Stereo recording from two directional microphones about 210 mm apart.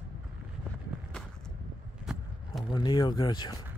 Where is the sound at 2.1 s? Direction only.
5° right (ahead or behind).